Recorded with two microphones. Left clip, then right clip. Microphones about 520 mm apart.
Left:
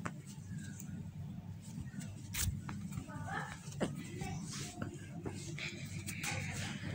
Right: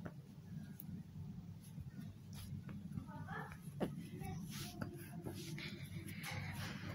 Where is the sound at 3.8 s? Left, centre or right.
Right.